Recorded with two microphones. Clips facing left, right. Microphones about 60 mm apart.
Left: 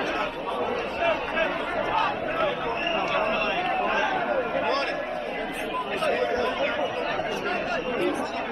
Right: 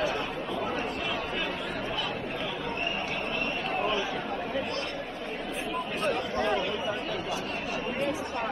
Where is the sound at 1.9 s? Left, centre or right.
Left.